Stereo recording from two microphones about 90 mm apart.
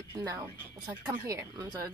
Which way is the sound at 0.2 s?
40° right (ahead or behind).